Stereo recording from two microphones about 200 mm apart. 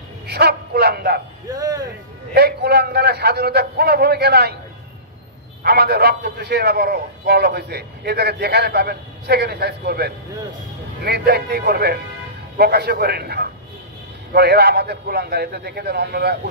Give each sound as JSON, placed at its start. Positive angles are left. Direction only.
{"t": 0.3, "sound": "speech", "side_deg": -55}
{"t": 1.5, "sound": "speech", "side_deg": -20}
{"t": 2.3, "sound": "a man's voice", "side_deg": -55}
{"t": 5.6, "sound": "a man's voice", "side_deg": -50}